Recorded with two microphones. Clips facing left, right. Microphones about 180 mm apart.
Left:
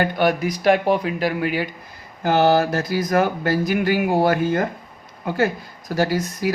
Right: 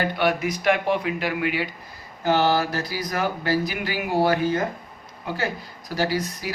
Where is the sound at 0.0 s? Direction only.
40° left (ahead or behind).